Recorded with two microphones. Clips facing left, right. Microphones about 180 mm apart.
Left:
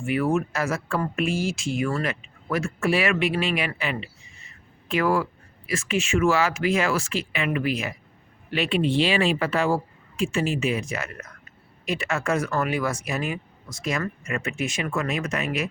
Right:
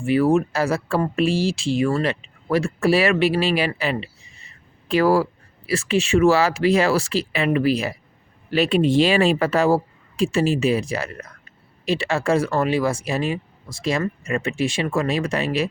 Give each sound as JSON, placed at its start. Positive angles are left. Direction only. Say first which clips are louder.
{"t": 0.0, "sound": "speech", "louder": "right 6 dB", "side_deg": -30}